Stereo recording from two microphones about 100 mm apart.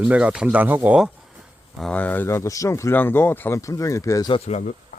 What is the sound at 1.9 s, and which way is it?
Speech, 15° left (ahead or behind).